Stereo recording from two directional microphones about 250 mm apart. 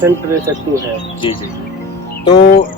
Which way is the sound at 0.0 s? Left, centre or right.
Centre.